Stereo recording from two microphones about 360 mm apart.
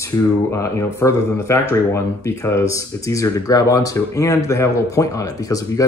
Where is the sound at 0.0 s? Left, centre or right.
Centre.